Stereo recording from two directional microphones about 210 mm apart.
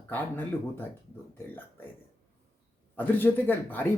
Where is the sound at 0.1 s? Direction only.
10° left (ahead or behind).